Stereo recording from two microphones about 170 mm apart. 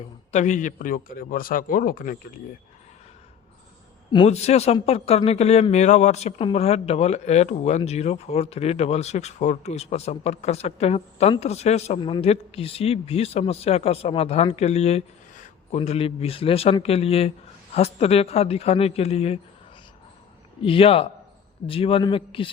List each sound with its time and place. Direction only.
0.3 s speech: 45° left (ahead or behind)
4.1 s speech: 35° left (ahead or behind)
11.9 s speech: 30° left (ahead or behind)
20.7 s speech: 35° left (ahead or behind)